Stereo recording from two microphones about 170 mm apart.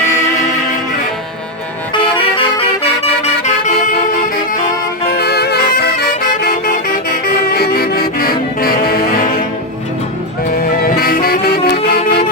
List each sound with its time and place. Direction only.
2.3 s music: 30° left (ahead or behind)
5.1 s music: 70° left (ahead or behind)
10.5 s music: 60° left (ahead or behind)